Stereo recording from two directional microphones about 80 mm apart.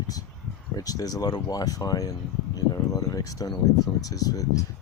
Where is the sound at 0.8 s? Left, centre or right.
Left.